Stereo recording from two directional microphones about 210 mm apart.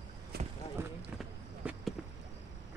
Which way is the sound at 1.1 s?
Centre (ahead or behind).